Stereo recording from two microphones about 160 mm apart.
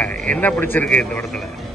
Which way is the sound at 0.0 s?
5° left (ahead or behind).